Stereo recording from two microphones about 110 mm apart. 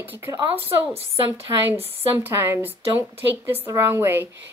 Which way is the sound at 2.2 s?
20° right (ahead or behind).